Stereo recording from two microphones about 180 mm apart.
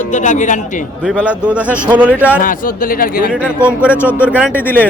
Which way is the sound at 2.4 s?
50° left (ahead or behind).